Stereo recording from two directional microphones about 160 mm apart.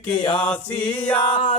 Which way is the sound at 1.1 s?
30° left (ahead or behind).